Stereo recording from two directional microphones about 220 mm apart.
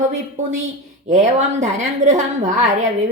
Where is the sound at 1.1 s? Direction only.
35° right (ahead or behind).